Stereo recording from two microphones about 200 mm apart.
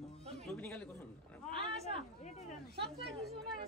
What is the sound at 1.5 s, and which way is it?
Speech, 30° right (ahead or behind).